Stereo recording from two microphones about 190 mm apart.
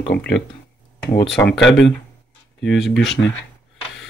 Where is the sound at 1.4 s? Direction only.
70° left (ahead or behind).